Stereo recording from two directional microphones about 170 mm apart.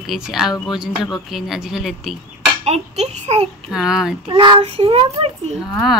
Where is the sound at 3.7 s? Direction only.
5° right (ahead or behind).